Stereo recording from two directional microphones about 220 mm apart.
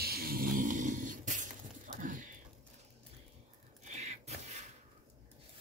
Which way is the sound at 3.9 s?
30° right (ahead or behind).